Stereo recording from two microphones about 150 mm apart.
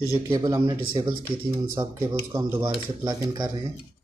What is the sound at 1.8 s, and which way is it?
A man's voice, 20° right (ahead or behind).